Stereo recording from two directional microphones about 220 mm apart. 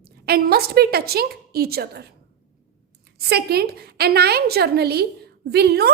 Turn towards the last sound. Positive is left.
turn(degrees=-45)  # may be behind; listen again after turning